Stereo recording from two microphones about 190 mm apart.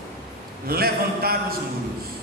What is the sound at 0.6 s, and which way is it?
Speech, 55° right (ahead or behind).